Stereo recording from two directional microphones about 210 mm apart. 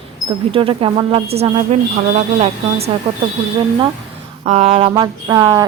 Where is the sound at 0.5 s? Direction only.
25° right (ahead or behind).